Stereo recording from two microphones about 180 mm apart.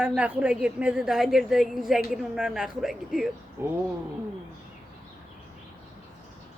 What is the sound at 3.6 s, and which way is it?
Speech, 10° right (ahead or behind).